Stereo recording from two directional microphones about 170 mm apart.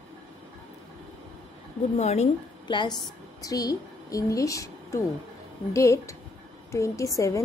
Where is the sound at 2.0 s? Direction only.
40° left (ahead or behind).